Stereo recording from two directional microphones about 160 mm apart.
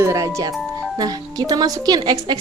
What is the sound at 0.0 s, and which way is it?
Music, 20° right (ahead or behind).